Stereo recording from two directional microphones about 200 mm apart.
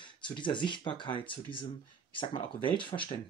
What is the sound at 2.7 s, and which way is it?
Speech, 25° left (ahead or behind).